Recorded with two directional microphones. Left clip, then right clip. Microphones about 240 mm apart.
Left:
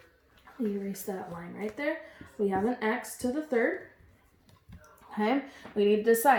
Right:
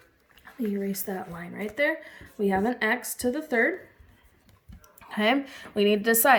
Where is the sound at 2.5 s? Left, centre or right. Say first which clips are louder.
Right 4 dB; right.